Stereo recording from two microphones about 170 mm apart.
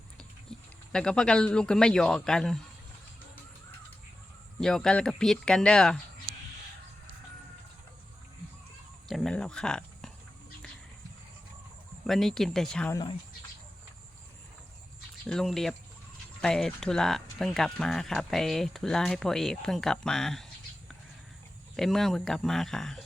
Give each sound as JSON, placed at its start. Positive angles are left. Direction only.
{"t": 0.9, "sound": "speech", "side_deg": 5}
{"t": 4.6, "sound": "speech", "side_deg": 5}
{"t": 9.0, "sound": "a sound", "side_deg": 0}
{"t": 12.0, "sound": "speech", "side_deg": 0}
{"t": 12.9, "sound": "speech", "side_deg": 25}
{"t": 15.3, "sound": "speech", "side_deg": 0}